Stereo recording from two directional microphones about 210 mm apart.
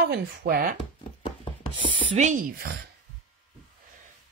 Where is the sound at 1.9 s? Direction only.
30° right (ahead or behind).